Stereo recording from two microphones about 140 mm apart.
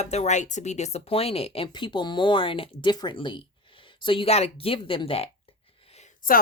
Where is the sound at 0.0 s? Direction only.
50° left (ahead or behind).